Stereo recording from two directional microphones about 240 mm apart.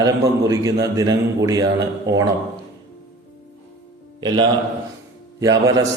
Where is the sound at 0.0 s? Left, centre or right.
Centre.